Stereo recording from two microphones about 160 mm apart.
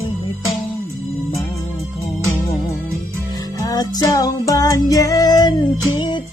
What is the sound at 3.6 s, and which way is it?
Music, 25° left (ahead or behind).